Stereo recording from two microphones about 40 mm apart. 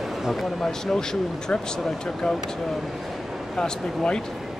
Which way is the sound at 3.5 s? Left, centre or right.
Centre.